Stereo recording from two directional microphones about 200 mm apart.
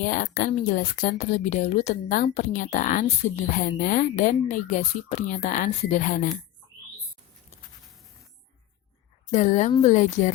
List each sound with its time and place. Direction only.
0.0 s a woman's voice: 40° left (ahead or behind)
9.3 s a woman's voice: 35° left (ahead or behind)